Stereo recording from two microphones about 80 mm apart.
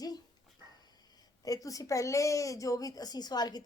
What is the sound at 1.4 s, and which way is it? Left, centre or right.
Speech, left.